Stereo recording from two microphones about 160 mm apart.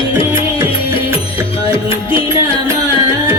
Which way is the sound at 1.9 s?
35° left (ahead or behind).